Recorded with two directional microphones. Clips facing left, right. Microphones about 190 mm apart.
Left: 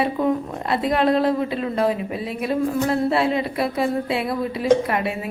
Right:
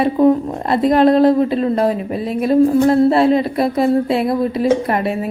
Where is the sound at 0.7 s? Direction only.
40° right (ahead or behind).